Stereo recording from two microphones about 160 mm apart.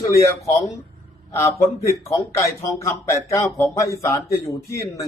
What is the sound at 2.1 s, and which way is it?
A man's voice, 20° left (ahead or behind).